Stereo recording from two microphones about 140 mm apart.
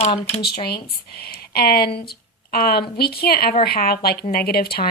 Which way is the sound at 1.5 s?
90° left.